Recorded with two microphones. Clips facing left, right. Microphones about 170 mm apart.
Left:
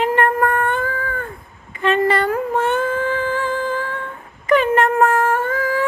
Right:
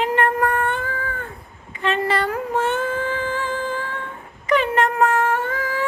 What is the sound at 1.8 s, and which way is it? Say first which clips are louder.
Music: left 4 dB; 55° left (ahead or behind).